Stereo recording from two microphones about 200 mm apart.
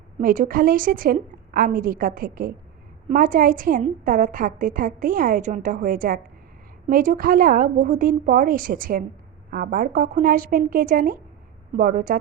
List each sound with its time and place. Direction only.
0.2 s a woman's voice: 45° right (ahead or behind)